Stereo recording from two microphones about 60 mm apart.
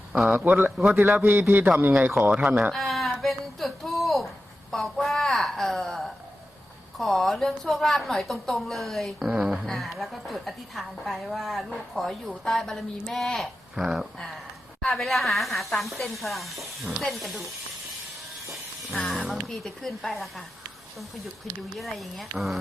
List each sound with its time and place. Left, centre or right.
0.3 s a man's voice: right
2.3 s speech: centre
2.7 s a sound: centre
4.7 s a woman's voice: centre
5.0 s a sound: centre
7.0 s a woman's voice: centre
13.7 s speech: centre
14.8 s a woman's voice: centre
18.9 s a woman's voice: centre
21.8 s a woman's voice: centre